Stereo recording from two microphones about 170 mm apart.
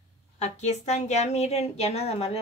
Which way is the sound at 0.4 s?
40° left (ahead or behind).